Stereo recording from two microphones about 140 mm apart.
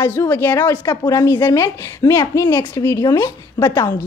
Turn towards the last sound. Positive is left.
turn(degrees=15)  # may be behind; listen again after turning